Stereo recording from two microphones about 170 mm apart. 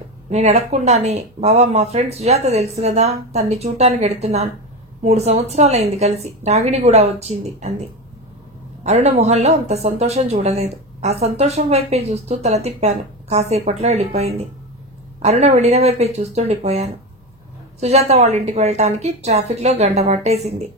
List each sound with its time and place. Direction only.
0.3 s speech: 40° right (ahead or behind)
8.8 s speech: 40° right (ahead or behind)